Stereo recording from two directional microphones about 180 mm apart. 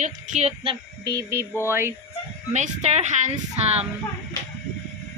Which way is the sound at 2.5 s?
40° right (ahead or behind).